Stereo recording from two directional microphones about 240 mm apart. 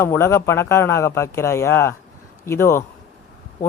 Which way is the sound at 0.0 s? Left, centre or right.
Centre.